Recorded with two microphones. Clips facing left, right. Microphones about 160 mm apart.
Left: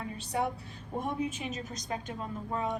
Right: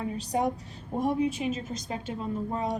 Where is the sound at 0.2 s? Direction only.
40° right (ahead or behind).